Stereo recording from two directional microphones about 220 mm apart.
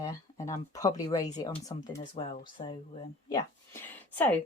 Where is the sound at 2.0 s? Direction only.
30° left (ahead or behind).